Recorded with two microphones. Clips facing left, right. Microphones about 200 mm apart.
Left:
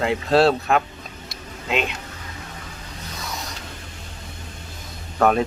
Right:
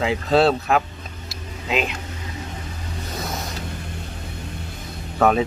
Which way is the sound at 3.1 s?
55° right (ahead or behind).